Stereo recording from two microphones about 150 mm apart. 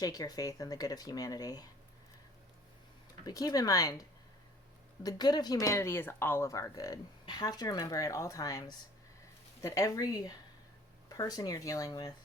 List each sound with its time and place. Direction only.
0.0 s speech: 25° left (ahead or behind)
3.2 s speech: 25° left (ahead or behind)
5.0 s speech: 25° left (ahead or behind)